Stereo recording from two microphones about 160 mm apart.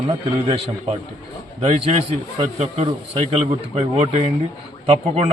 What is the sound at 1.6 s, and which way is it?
Speech, 40° right (ahead or behind).